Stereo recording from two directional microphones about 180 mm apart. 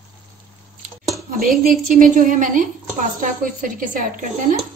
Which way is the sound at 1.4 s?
50° right (ahead or behind).